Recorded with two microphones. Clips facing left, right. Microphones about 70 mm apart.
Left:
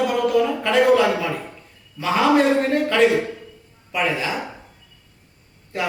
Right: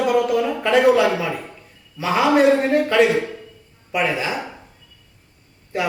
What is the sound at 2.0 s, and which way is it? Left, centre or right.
A man's voice, centre.